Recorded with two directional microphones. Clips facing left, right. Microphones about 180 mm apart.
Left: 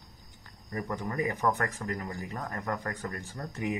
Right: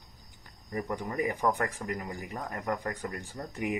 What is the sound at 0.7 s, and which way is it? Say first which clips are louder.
Speech: right 1 dB; 15° right (ahead or behind).